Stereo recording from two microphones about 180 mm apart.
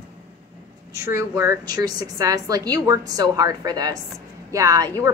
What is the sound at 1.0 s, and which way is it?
A woman's voice, 15° right (ahead or behind).